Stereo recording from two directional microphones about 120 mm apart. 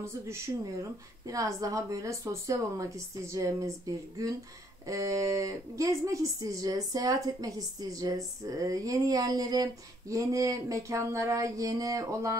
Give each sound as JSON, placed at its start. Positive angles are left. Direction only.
{"t": 1.2, "sound": "speech", "side_deg": -30}